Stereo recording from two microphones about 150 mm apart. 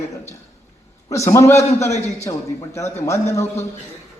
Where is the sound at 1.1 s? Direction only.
20° left (ahead or behind).